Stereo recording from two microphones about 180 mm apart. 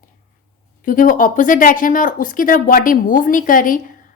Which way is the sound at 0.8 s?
50° left (ahead or behind).